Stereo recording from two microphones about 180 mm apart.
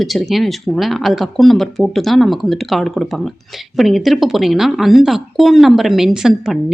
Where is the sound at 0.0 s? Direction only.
Centre (ahead or behind).